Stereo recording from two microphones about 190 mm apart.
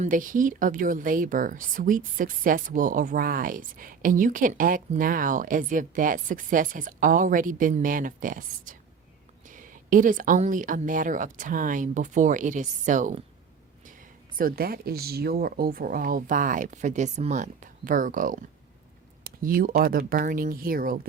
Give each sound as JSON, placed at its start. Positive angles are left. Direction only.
{"t": 0.0, "sound": "speech", "side_deg": -45}
{"t": 14.3, "sound": "speech", "side_deg": -50}